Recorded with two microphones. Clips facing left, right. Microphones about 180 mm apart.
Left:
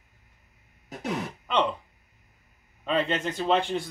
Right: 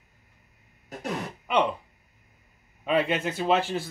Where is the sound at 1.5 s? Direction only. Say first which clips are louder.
Right 1 dB; 10° right (ahead or behind).